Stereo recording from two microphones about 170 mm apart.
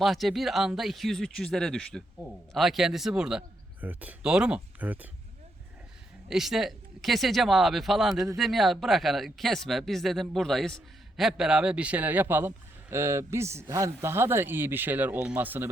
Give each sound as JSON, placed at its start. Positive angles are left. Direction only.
{"t": 0.0, "sound": "speech", "side_deg": 0}
{"t": 6.2, "sound": "speech", "side_deg": 0}
{"t": 8.1, "sound": "speech", "side_deg": -20}
{"t": 8.4, "sound": "speech", "side_deg": 0}